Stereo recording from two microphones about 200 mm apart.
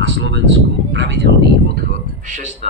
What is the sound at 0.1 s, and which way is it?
Speech, 60° right (ahead or behind).